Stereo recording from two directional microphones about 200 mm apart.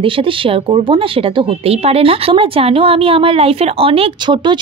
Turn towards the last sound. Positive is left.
turn(degrees=-20)  # may be behind; listen again after turning